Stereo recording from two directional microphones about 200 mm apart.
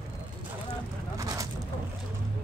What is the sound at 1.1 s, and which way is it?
Vehicle, 15° right (ahead or behind).